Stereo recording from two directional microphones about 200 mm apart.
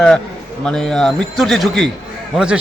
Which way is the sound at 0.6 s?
5° left (ahead or behind).